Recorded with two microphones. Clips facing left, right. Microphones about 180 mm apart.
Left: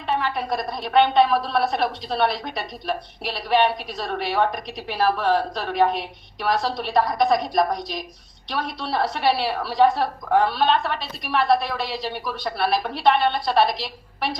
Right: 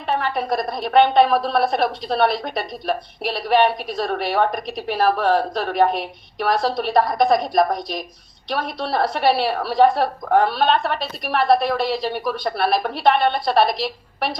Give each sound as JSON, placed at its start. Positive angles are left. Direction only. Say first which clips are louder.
{"t": 0.1, "sound": "a woman's voice", "louder": "right 2 dB", "side_deg": -45}